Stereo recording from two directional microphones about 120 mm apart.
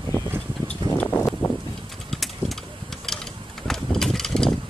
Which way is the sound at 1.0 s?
15° left (ahead or behind).